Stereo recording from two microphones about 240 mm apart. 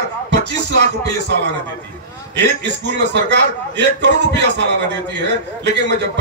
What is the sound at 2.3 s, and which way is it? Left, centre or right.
A man's voice, right.